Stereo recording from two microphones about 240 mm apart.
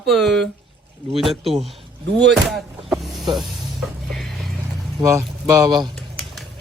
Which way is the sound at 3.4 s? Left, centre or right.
Centre.